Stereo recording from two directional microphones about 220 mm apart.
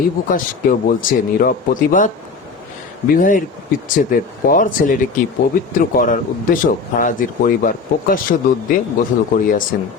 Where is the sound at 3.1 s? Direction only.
40° left (ahead or behind).